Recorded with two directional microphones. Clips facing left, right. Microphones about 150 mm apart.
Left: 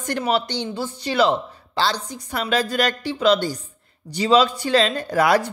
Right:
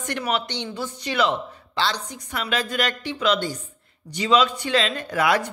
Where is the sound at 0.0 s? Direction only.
35° left (ahead or behind).